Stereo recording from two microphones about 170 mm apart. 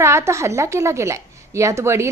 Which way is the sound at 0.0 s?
15° right (ahead or behind).